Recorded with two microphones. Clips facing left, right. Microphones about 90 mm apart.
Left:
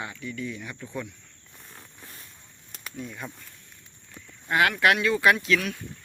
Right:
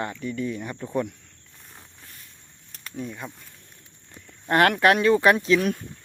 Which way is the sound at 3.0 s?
10° right (ahead or behind).